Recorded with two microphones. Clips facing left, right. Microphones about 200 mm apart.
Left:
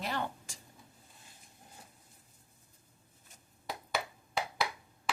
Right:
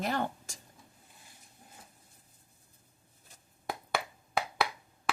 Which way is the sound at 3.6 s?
55° right (ahead or behind).